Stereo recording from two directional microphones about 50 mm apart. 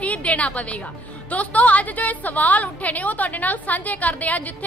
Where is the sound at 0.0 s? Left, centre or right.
Left.